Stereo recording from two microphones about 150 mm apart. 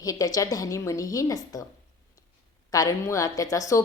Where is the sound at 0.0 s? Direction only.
25° left (ahead or behind).